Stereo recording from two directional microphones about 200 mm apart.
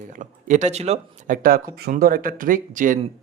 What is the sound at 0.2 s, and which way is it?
Speech, 40° right (ahead or behind).